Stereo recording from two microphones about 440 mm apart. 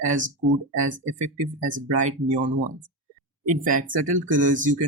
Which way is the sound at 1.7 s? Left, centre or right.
Centre.